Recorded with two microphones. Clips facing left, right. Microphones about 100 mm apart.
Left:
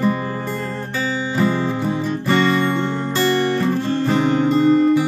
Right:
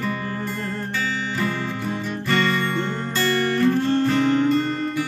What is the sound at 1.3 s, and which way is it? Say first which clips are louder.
Music: left 7 dB; 20° left (ahead or behind).